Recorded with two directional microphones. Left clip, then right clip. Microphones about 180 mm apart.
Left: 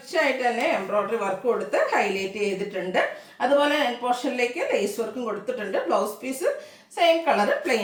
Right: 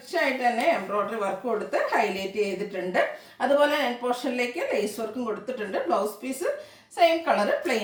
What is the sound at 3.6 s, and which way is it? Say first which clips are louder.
A woman's voice: left 1 dB; 10° left (ahead or behind).